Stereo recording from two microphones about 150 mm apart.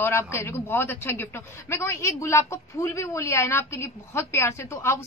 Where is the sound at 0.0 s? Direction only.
15° left (ahead or behind).